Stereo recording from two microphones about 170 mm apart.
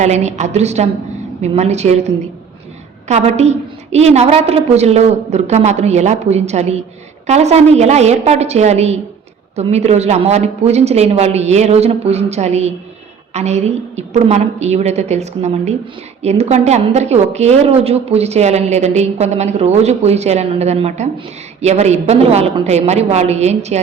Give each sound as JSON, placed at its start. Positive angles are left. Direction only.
{"t": 0.0, "sound": "a woman's voice", "side_deg": -40}